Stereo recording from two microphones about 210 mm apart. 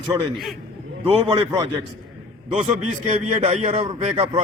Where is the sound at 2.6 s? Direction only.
30° right (ahead or behind).